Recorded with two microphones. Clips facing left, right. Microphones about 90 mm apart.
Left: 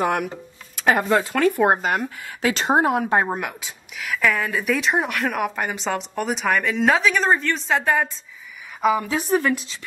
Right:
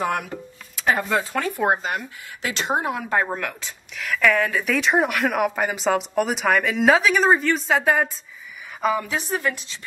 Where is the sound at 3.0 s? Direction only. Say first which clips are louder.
Left 2 dB; 20° left (ahead or behind).